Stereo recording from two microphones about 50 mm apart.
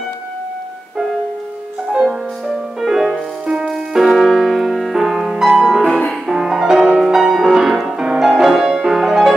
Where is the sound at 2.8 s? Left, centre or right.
Centre.